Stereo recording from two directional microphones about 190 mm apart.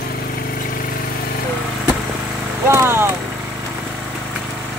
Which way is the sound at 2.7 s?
15° right (ahead or behind).